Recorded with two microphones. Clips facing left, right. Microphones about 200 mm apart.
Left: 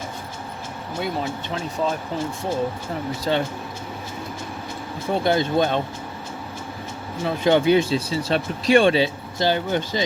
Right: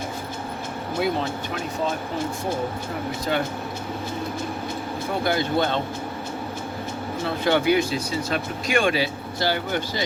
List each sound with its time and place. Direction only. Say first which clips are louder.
3.3 s speech: left 3 dB; 30° left (ahead or behind)
5.2 s speech: left 3 dB; 20° left (ahead or behind)
7.3 s speech: left 3 dB; 20° left (ahead or behind)